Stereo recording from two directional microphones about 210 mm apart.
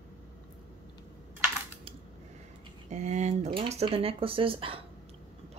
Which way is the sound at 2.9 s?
35° right (ahead or behind).